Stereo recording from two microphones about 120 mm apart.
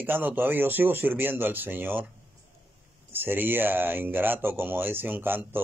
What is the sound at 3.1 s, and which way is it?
Speech, 15° right (ahead or behind).